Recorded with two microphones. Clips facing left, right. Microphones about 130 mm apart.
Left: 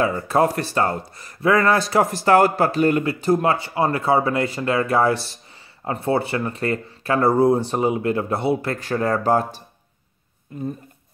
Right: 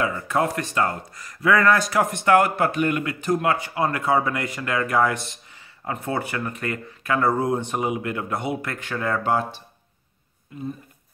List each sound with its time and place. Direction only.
0.0 s speech: 30° left (ahead or behind)